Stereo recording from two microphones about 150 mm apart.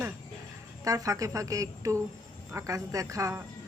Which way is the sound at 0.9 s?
20° right (ahead or behind).